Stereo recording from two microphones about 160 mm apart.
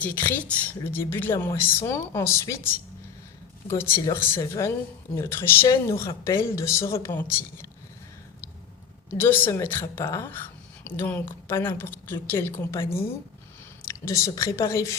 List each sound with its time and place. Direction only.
0.0 s a woman's voice: 15° left (ahead or behind)
3.7 s a woman's voice: 15° left (ahead or behind)
9.0 s a woman's voice: 15° left (ahead or behind)